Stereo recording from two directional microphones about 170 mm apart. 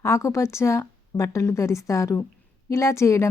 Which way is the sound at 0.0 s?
15° left (ahead or behind).